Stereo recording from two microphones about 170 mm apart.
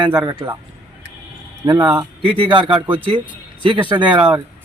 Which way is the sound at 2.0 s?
30° right (ahead or behind).